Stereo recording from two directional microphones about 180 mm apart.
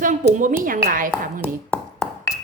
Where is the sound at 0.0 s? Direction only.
45° right (ahead or behind).